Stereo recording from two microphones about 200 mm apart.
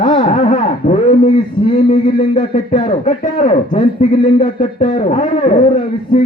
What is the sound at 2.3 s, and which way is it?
Speech, 35° left (ahead or behind).